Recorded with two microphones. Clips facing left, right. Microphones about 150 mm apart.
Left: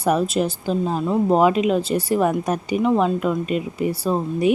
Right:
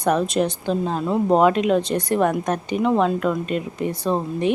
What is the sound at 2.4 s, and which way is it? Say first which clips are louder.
Speech: left 1 dB; 10° left (ahead or behind).